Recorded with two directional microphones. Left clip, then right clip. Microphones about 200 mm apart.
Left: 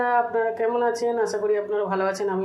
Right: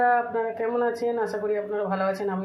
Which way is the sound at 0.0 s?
25° left (ahead or behind).